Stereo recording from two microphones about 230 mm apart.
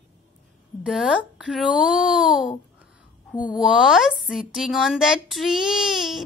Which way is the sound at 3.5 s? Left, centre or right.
Centre.